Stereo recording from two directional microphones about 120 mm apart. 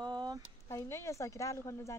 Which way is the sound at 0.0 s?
35° right (ahead or behind).